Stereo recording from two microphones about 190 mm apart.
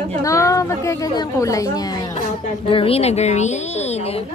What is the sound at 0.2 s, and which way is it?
A woman's voice, 15° left (ahead or behind).